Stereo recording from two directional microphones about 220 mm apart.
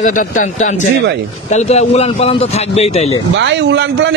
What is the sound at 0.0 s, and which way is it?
A man's voice, 35° left (ahead or behind).